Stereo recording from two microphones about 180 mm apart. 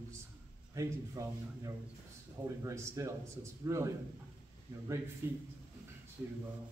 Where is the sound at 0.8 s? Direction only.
15° right (ahead or behind).